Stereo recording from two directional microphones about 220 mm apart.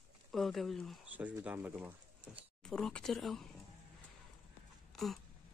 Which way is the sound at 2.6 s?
5° left (ahead or behind).